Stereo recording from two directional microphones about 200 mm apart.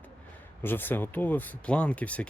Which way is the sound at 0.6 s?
10° left (ahead or behind).